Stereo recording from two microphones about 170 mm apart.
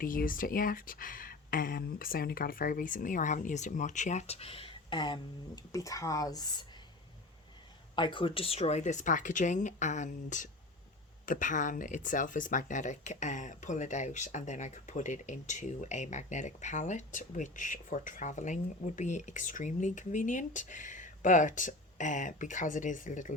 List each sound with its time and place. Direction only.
0.0 s speech: 55° left (ahead or behind); by 6.5 s 20° left (ahead or behind)
7.9 s speech: 30° left (ahead or behind); by 23.3 s 50° left (ahead or behind)